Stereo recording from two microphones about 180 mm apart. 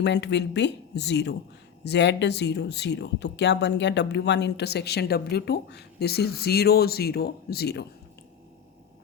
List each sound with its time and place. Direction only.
0.0 s speech: 70° left (ahead or behind)